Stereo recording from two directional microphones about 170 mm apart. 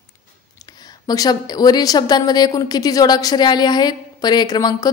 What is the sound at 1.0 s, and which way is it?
A woman's voice, 20° left (ahead or behind).